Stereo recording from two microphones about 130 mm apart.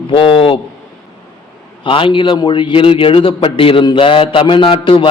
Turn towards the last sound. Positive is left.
turn(degrees=40)  # may be behind; listen again after turning